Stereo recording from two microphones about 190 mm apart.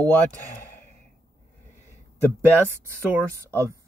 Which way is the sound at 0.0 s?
15° right (ahead or behind).